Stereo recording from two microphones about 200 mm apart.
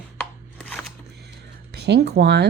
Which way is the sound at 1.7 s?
55° right (ahead or behind).